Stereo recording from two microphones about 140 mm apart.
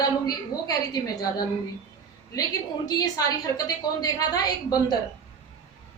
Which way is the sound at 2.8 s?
30° left (ahead or behind).